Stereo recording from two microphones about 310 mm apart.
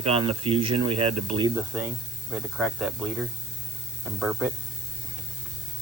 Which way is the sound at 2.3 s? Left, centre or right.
Centre.